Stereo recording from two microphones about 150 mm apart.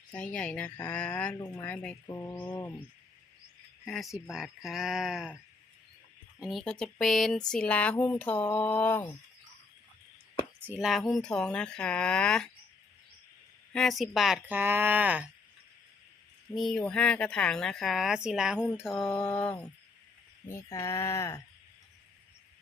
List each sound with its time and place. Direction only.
0.1 s speech: 10° left (ahead or behind)
3.8 s speech: centre (ahead or behind)
6.4 s speech: centre (ahead or behind)
10.7 s speech: 5° right (ahead or behind)
13.7 s speech: centre (ahead or behind)
16.6 s speech: centre (ahead or behind); by 21.4 s 20° left (ahead or behind)